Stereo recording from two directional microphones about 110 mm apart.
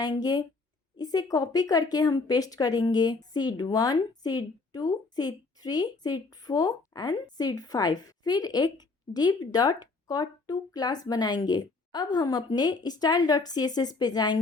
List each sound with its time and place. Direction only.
0.0 s speech: 35° left (ahead or behind)